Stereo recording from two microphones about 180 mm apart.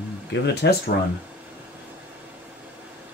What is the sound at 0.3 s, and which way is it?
Speech, 65° left (ahead or behind).